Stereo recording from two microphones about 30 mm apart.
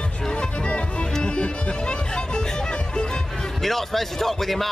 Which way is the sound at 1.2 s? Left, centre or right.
Left.